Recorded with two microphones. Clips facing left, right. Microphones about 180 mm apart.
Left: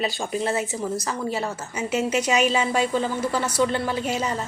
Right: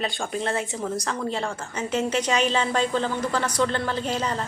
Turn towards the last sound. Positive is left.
turn(degrees=10)  # may be behind; listen again after turning